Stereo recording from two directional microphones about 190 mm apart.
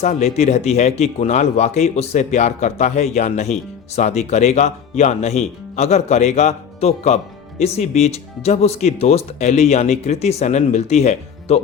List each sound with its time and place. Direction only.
0.0 s speech: 35° left (ahead or behind)